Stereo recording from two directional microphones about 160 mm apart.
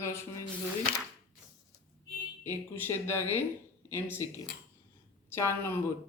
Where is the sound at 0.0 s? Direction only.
15° left (ahead or behind).